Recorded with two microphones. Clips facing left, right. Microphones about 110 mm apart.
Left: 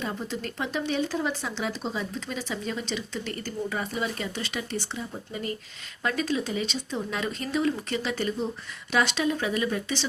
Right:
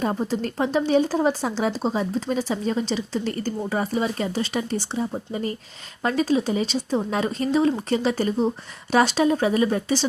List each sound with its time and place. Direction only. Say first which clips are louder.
0.0 s speech: right 8 dB; 40° right (ahead or behind)